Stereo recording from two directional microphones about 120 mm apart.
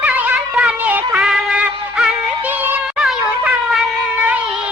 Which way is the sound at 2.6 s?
15° right (ahead or behind).